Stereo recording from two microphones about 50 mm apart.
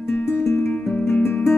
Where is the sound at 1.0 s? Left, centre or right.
Left.